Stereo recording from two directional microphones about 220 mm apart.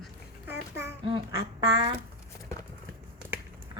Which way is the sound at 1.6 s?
20° right (ahead or behind).